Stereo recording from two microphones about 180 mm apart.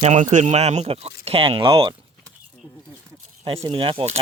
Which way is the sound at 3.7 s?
30° right (ahead or behind).